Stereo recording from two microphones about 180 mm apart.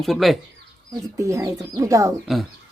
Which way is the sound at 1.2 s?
15° right (ahead or behind).